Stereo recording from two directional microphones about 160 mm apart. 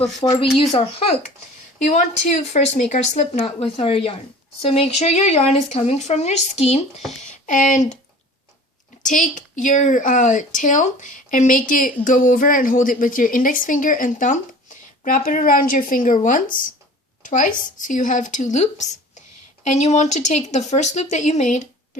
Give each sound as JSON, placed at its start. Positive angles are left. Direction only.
{"t": 0.3, "sound": "speech", "side_deg": 35}
{"t": 7.4, "sound": "speech", "side_deg": 50}
{"t": 9.0, "sound": "a woman's voice", "side_deg": 55}